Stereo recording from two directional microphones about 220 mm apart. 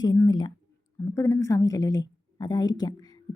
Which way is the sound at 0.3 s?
20° left (ahead or behind).